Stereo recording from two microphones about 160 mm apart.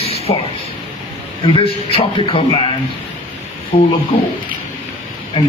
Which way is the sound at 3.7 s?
40° left (ahead or behind).